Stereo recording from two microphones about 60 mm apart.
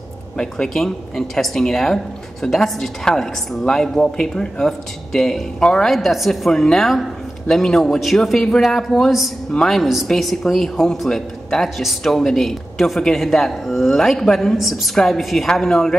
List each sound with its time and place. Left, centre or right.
0.4 s a woman's voice: centre
5.9 s speech: centre
14.6 s speech: centre